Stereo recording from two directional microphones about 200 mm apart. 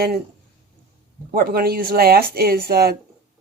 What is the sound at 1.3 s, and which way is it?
Speech, 45° right (ahead or behind).